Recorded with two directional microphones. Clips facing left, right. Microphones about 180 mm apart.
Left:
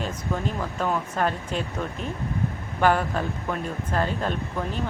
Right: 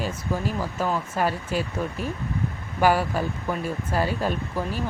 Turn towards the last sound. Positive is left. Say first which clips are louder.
# right 1 dB
turn(degrees=-5)  # may be behind; listen again after turning